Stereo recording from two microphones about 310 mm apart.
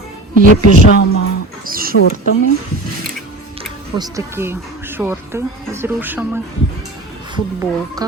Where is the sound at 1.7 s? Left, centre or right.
Right.